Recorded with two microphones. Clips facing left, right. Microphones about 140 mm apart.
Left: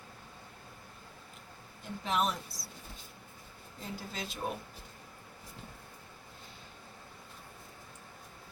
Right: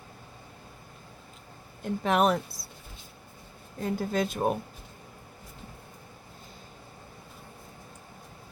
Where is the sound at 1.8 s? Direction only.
60° right (ahead or behind).